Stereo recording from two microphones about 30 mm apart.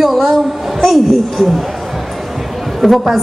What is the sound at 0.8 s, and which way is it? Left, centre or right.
Speech, centre.